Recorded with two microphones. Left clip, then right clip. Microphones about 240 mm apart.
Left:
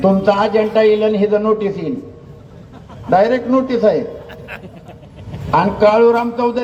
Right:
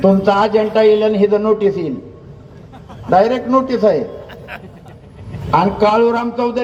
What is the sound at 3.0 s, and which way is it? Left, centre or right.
Speech, right.